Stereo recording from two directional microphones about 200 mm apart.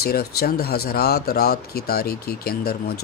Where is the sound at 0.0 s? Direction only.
50° left (ahead or behind).